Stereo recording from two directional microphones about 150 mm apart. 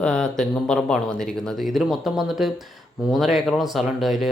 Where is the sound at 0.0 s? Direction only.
5° left (ahead or behind).